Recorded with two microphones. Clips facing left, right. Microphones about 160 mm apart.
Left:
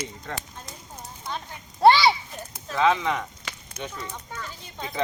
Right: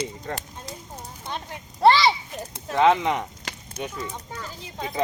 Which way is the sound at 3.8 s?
10° right (ahead or behind).